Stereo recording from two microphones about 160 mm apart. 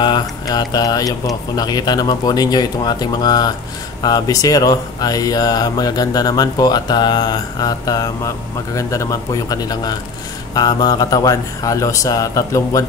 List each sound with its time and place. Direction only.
0.0 s speech: 25° left (ahead or behind)